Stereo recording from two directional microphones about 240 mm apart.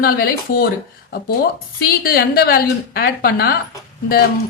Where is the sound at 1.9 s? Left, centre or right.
Left.